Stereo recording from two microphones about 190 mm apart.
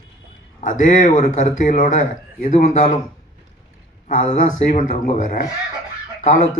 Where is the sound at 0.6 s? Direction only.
40° left (ahead or behind).